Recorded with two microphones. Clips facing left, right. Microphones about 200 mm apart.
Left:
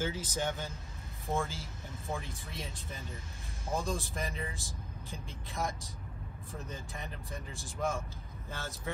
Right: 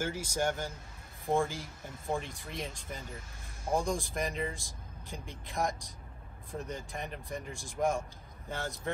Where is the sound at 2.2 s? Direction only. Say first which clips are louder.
Right 3 dB; 15° right (ahead or behind).